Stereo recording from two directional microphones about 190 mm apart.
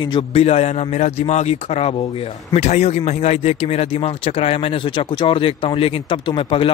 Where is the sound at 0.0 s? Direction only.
25° left (ahead or behind).